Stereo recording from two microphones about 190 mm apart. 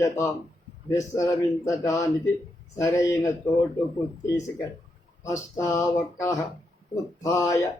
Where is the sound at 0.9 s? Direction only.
15° left (ahead or behind).